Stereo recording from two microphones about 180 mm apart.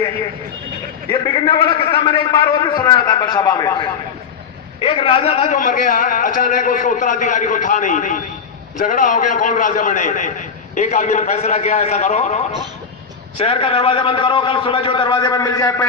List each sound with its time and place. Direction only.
1.1 s a man's voice: 30° left (ahead or behind)
4.8 s a man's voice: 30° left (ahead or behind)